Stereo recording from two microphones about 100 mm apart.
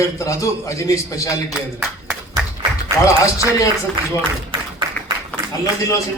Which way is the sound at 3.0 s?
35° left (ahead or behind).